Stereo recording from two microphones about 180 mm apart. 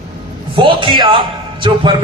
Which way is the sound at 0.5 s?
30° right (ahead or behind).